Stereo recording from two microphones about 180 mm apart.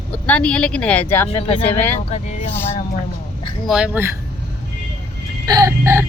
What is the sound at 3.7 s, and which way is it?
Speech, 5° right (ahead or behind).